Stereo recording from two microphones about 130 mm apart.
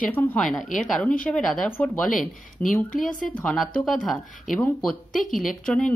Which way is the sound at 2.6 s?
90° left.